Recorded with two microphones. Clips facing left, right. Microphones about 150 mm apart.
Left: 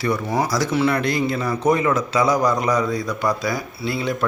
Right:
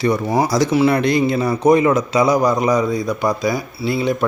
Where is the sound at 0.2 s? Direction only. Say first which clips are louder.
Right 4 dB; 35° right (ahead or behind).